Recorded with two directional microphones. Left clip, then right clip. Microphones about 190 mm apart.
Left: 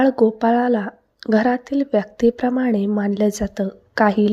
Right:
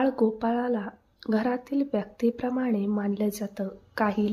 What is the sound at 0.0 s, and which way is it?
Speech, 30° left (ahead or behind).